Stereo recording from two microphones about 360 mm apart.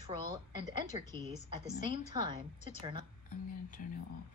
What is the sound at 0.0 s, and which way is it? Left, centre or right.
A woman's voice, centre.